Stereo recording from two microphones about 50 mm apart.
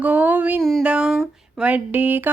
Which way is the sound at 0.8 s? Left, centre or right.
Right.